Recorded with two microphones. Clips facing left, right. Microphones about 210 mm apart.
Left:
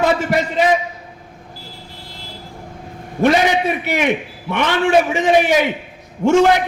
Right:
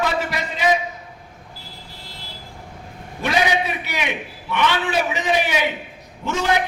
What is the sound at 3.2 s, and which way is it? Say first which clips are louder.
A man's voice: left 6 dB; 50° left (ahead or behind).